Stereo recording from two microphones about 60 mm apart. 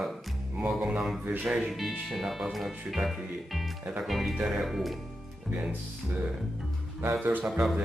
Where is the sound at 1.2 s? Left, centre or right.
Right.